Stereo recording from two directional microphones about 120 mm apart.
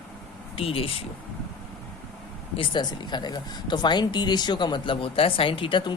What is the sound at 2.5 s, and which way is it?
Speech, 40° left (ahead or behind).